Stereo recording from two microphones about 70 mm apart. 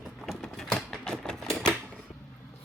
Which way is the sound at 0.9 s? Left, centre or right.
Centre.